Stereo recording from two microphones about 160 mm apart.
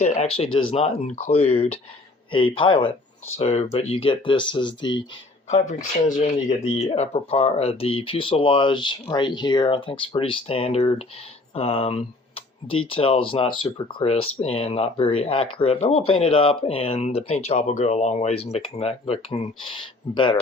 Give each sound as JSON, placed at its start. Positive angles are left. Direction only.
{"t": 0.0, "sound": "speech", "side_deg": 45}
{"t": 5.5, "sound": "speech", "side_deg": 45}